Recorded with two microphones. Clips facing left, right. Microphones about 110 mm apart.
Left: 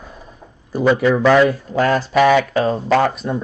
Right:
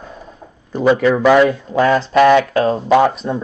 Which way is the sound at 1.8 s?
Centre (ahead or behind).